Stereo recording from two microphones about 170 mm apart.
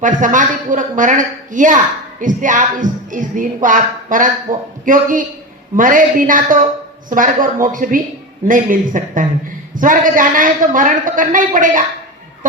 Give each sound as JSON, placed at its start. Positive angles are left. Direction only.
{"t": 0.0, "sound": "a woman's voice", "side_deg": -50}